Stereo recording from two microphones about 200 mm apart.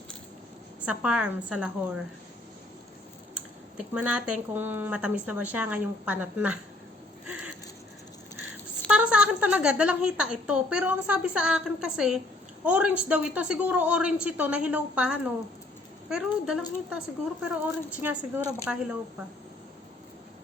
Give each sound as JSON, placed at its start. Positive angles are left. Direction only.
{"t": 0.9, "sound": "a woman's voice", "side_deg": -5}
{"t": 3.3, "sound": "speech", "side_deg": -5}
{"t": 7.3, "sound": "a sound", "side_deg": -5}
{"t": 8.9, "sound": "a woman's voice", "side_deg": -5}